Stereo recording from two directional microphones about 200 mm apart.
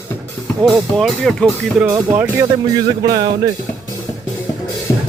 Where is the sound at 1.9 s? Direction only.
20° right (ahead or behind).